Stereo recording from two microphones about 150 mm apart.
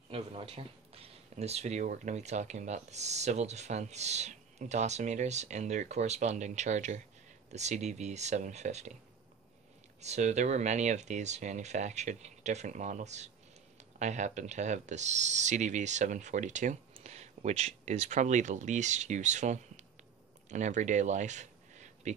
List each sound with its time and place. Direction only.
0.1 s speech: 40° right (ahead or behind)
10.0 s speech: 50° right (ahead or behind)